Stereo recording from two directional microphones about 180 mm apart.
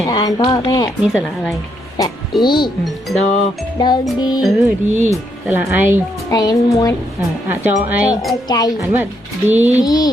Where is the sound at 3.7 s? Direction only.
25° left (ahead or behind).